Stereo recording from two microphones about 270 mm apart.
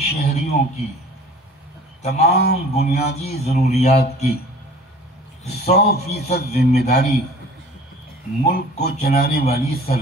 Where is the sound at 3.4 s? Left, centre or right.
Left.